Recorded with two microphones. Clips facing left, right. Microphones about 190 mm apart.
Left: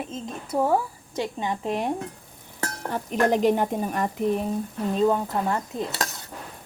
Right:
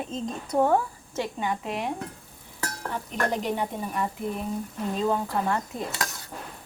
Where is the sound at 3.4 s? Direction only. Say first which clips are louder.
Left 7 dB; 45° left (ahead or behind).